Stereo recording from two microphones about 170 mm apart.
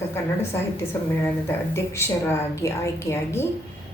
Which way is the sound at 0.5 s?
15° left (ahead or behind).